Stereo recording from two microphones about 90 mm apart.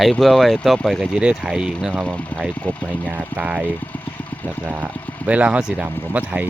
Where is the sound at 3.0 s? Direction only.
15° right (ahead or behind).